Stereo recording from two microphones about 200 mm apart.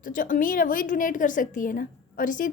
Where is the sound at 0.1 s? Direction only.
40° left (ahead or behind).